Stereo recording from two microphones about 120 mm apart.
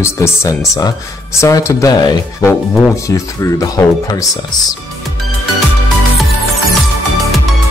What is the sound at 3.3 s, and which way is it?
Speech, 30° left (ahead or behind).